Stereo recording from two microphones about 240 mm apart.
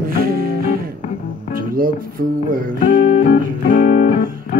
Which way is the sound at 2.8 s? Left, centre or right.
Left.